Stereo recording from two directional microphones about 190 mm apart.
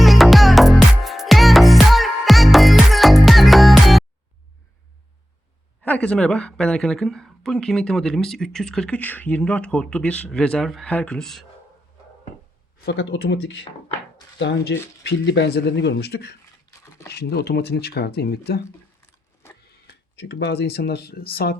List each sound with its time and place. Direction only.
0.0 s music: centre (ahead or behind)
5.8 s a woman's voice: 5° left (ahead or behind)
12.8 s speech: 65° left (ahead or behind)
19.6 s speech: 60° left (ahead or behind)